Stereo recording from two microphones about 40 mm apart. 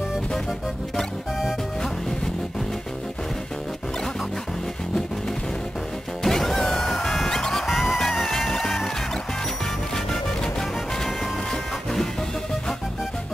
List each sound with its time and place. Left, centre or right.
6.2 s music: centre
7.6 s music: centre